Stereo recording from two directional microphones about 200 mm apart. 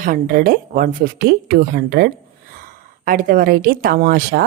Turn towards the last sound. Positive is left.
turn(degrees=-50)  # may be behind; listen again after turning